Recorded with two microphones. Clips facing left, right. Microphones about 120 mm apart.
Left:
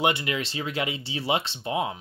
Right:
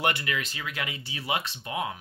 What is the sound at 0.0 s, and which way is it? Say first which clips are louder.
Speech: left 3 dB; 20° left (ahead or behind).